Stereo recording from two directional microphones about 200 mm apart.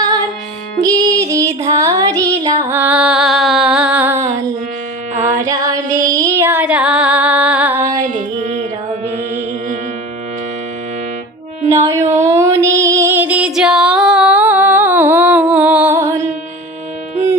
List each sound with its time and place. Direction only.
0.8 s child singing: 15° right (ahead or behind)
5.2 s music: 15° right (ahead or behind)
9.0 s mantra: 30° right (ahead or behind)
11.7 s music: 15° right (ahead or behind)